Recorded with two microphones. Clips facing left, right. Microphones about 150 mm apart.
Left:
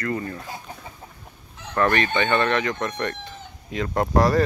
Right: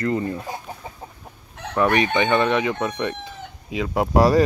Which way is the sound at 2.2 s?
15° right (ahead or behind).